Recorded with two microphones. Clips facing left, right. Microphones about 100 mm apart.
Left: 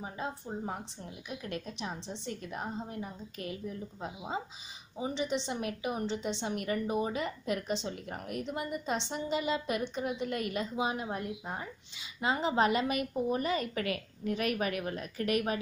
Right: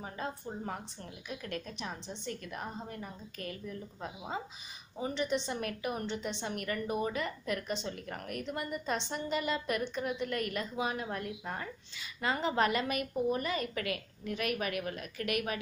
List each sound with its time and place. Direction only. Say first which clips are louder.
0.0 s a woman's voice: left 1 dB; 15° left (ahead or behind)